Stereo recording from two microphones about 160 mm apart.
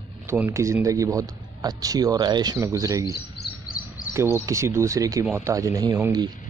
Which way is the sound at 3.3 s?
75° left (ahead or behind).